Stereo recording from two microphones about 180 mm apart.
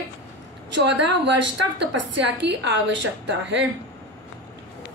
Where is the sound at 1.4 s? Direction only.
80° right.